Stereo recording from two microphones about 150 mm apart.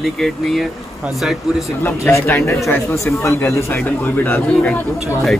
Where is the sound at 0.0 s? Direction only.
Centre (ahead or behind).